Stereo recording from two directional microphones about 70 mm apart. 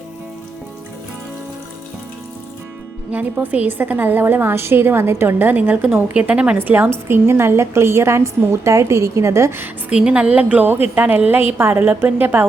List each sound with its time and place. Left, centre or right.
3.1 s a woman's voice: right
6.6 s a woman's voice: right
9.9 s a woman's voice: centre; by 12.5 s right